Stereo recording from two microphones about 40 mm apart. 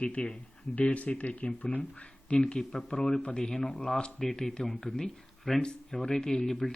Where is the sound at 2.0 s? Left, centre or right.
Left.